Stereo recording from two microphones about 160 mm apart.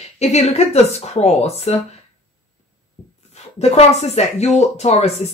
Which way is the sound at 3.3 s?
40° left (ahead or behind).